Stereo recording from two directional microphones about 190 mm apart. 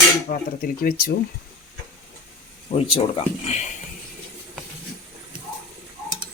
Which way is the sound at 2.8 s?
30° left (ahead or behind).